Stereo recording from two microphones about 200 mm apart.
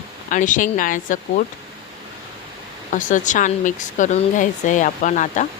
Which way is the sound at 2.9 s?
40° left (ahead or behind).